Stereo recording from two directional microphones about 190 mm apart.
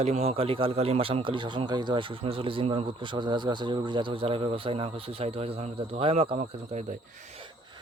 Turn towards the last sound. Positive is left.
turn(degrees=-30)  # may be behind; listen again after turning